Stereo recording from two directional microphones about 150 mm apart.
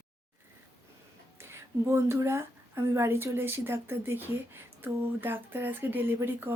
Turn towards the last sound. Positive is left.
turn(degrees=-15)  # may be behind; listen again after turning